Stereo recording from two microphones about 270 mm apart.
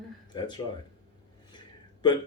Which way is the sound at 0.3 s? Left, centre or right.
Centre.